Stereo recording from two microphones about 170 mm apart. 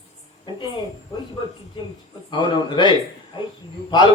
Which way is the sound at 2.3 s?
30° left (ahead or behind).